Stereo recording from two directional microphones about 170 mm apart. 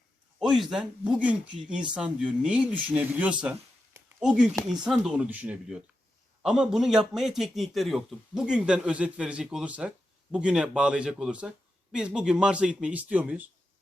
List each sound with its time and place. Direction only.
0.3 s a man's voice: centre (ahead or behind)
3.4 s a sound: 15° right (ahead or behind)
4.2 s a man's voice: 5° right (ahead or behind)